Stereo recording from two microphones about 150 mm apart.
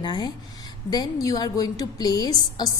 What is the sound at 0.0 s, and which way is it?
A woman's voice, 30° left (ahead or behind).